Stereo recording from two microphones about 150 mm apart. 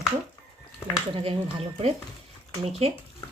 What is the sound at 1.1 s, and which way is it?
Speech, 40° right (ahead or behind).